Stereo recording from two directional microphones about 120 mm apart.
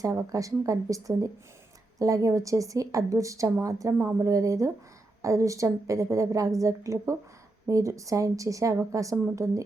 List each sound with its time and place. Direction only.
0.0 s a woman's voice: 25° right (ahead or behind)